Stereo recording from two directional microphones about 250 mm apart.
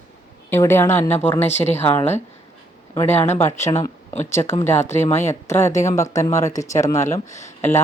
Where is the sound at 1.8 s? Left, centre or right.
Centre.